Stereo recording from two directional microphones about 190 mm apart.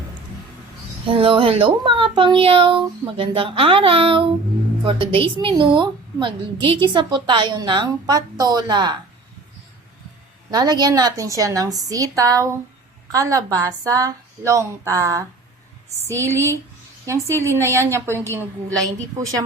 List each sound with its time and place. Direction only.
1.0 s a woman's voice: 30° right (ahead or behind)
10.5 s a woman's voice: 20° right (ahead or behind)